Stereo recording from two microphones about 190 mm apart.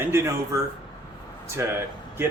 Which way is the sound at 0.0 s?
15° right (ahead or behind).